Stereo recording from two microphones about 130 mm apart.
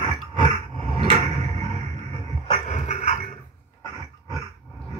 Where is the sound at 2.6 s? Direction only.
65° left (ahead or behind).